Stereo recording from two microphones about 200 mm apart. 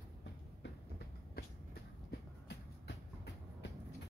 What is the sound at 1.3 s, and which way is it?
Train, 50° left (ahead or behind).